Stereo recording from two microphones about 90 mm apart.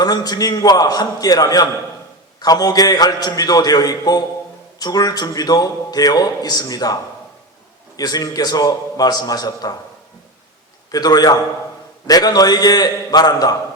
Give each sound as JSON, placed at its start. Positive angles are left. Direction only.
{"t": 0.0, "sound": "a man's voice", "side_deg": 45}
{"t": 10.9, "sound": "a man's voice", "side_deg": 45}